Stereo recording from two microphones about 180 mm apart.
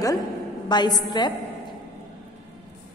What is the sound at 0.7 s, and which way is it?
Speech, 25° left (ahead or behind).